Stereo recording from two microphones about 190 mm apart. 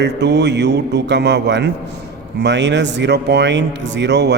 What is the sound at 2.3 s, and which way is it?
Speech, 65° right (ahead or behind).